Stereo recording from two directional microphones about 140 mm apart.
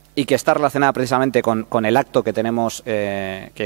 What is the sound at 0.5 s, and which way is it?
Speech, 15° right (ahead or behind).